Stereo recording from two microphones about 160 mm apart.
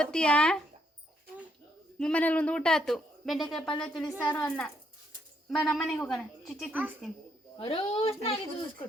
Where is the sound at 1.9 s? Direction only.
5° left (ahead or behind).